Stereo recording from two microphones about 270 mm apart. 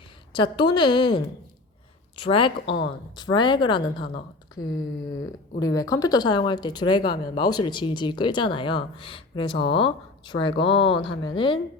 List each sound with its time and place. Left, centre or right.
0.3 s speech: centre
2.6 s speech: left
3.2 s speech: centre
5.5 s speech: centre